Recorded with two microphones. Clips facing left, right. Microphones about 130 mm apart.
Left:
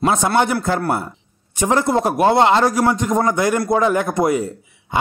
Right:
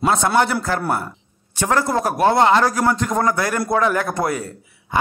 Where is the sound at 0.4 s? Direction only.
20° left (ahead or behind).